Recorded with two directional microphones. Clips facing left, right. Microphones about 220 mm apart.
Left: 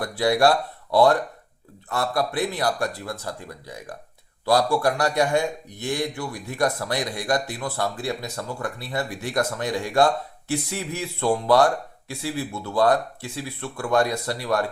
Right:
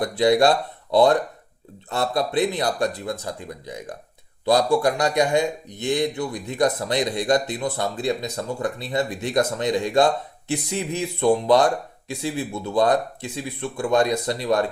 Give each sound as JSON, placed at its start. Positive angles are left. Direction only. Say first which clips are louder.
{"t": 0.0, "sound": "a man's voice", "louder": "right 2 dB", "side_deg": -20}